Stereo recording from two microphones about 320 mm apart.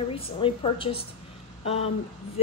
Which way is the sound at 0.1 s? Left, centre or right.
Centre.